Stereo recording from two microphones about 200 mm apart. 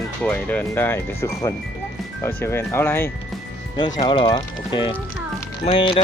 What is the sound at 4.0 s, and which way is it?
Speech, 25° left (ahead or behind).